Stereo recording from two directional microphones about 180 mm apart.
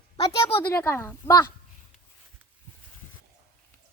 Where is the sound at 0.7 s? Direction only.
15° left (ahead or behind).